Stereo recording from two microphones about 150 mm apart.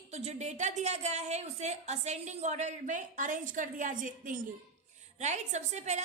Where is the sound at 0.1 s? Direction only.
50° right (ahead or behind).